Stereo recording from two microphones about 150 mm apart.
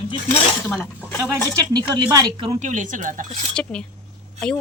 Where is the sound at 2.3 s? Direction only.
35° right (ahead or behind).